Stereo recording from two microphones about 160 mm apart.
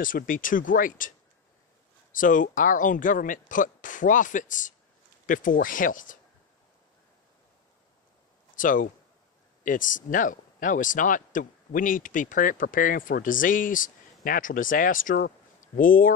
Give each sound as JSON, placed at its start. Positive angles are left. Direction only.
{"t": 0.0, "sound": "speech", "side_deg": 55}
{"t": 2.1, "sound": "speech", "side_deg": 55}
{"t": 8.5, "sound": "speech", "side_deg": 55}